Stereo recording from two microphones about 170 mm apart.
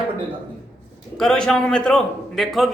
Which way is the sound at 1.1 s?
5° left (ahead or behind).